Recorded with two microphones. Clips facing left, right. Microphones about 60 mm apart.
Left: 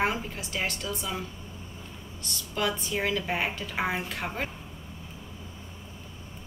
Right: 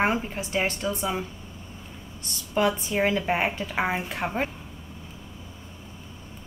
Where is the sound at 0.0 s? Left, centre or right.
Right.